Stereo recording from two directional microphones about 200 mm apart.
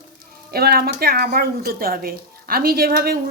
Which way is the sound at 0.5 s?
50° right (ahead or behind).